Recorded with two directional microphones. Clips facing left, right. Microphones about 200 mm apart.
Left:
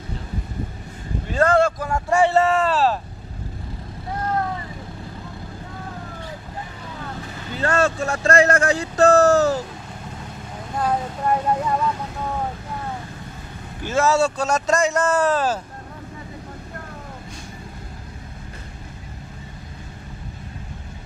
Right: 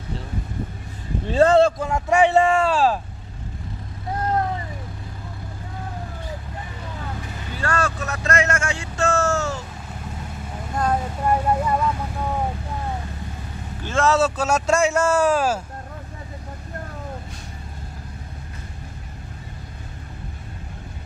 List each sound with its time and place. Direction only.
1.2 s a sound: 30° right (ahead or behind)
1.9 s speech: 15° right (ahead or behind)
7.5 s speech: 25° left (ahead or behind)
10.8 s speech: centre (ahead or behind)
13.8 s speech: 5° left (ahead or behind)